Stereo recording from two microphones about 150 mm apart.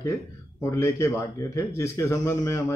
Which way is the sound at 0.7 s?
20° left (ahead or behind).